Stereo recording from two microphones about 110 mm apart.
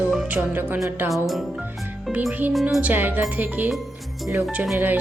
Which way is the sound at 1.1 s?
Centre (ahead or behind).